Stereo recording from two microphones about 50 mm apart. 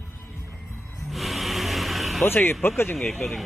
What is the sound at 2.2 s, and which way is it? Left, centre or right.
Speech, left.